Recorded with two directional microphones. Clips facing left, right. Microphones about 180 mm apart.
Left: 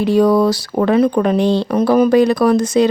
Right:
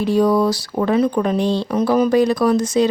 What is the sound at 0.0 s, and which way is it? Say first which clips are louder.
Speech: left 3 dB; 70° left (ahead or behind).